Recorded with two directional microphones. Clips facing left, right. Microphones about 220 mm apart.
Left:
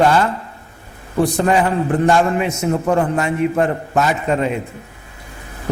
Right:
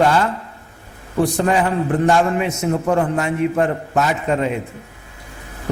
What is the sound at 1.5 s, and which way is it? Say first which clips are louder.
A man's voice: left 2 dB; 20° left (ahead or behind).